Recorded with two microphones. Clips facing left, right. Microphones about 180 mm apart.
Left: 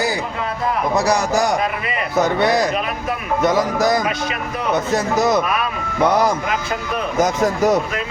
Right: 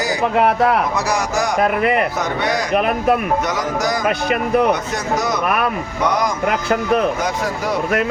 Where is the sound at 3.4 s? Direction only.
30° left (ahead or behind).